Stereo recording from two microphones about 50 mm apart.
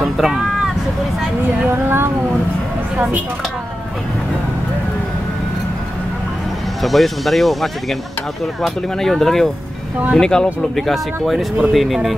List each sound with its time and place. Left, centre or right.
0.0 s speech: centre
1.7 s speech: right
6.8 s speech: centre
10.8 s speech: centre